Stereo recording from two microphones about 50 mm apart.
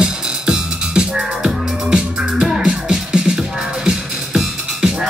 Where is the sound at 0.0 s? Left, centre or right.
Centre.